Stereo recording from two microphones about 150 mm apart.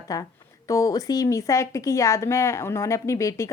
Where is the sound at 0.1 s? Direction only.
20° left (ahead or behind).